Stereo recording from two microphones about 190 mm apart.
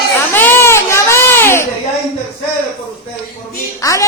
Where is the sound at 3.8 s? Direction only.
15° left (ahead or behind).